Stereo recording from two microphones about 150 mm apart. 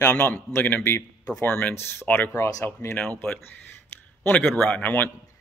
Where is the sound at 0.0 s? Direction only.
15° left (ahead or behind).